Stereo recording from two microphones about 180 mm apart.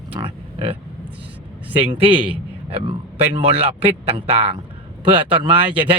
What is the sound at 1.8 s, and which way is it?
Speech, 30° right (ahead or behind).